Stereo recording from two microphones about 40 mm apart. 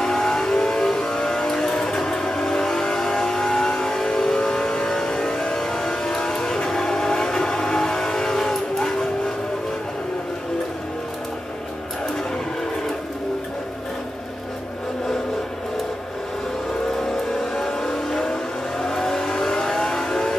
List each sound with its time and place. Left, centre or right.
0.0 s vehicle: centre
17.4 s vehicle: centre